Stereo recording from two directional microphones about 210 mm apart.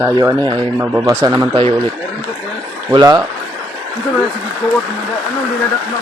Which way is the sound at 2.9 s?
20° right (ahead or behind).